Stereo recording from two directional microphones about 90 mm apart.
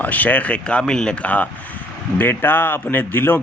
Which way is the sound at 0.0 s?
20° left (ahead or behind).